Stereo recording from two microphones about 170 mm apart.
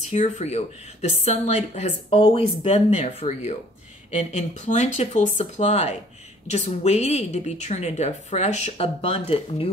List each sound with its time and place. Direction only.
0.1 s speech: 40° left (ahead or behind)
2.1 s speech: 30° left (ahead or behind)